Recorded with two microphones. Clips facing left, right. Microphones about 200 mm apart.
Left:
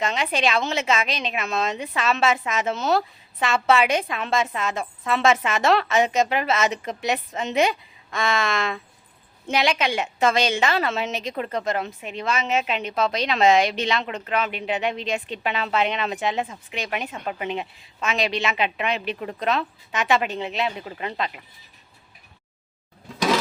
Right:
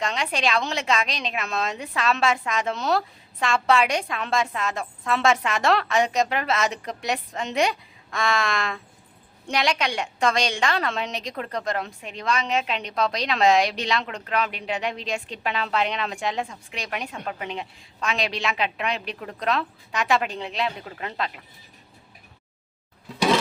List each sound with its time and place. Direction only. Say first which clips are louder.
0.0 s a woman's voice: left 2 dB; centre (ahead or behind)